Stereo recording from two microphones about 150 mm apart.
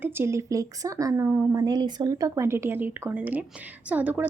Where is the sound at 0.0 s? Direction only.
15° right (ahead or behind).